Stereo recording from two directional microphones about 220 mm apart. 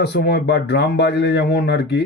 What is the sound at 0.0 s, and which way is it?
Speech, 50° left (ahead or behind).